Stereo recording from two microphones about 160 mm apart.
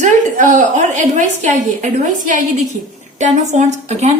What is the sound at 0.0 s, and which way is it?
A woman's voice, 50° right (ahead or behind).